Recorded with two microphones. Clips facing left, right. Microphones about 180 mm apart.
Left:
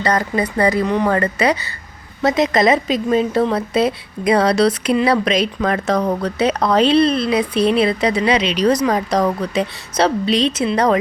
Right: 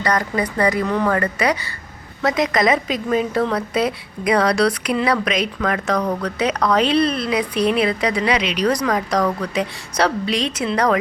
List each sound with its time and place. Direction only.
0.0 s a woman's voice: 25° left (ahead or behind)